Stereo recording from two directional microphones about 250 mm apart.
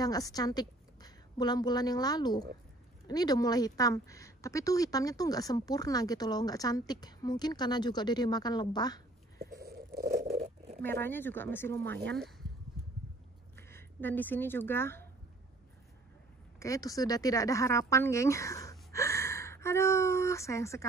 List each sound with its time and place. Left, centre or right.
0.0 s a woman's voice: centre
9.7 s a sound: right
10.8 s speech: centre
11.9 s speech: right
13.6 s speech: centre
16.5 s speech: centre